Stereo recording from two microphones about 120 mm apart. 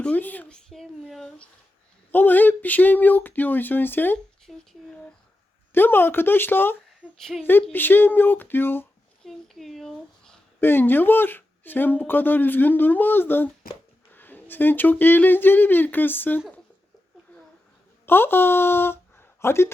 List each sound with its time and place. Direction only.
0.0 s speech: 15° left (ahead or behind)
2.1 s speech: 15° left (ahead or behind)
4.5 s speech: 5° left (ahead or behind)
5.7 s speech: 15° left (ahead or behind)
9.2 s speech: centre (ahead or behind)
10.6 s speech: 15° left (ahead or behind)
18.0 s speech: 20° left (ahead or behind)